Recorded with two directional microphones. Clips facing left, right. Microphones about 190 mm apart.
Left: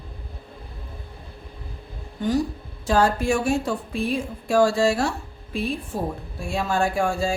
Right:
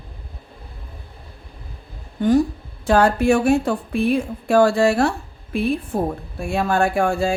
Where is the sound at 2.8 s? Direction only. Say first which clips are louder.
Right 5 dB; 60° right (ahead or behind).